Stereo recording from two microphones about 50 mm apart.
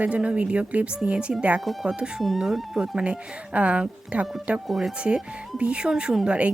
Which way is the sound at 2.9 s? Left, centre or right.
Right.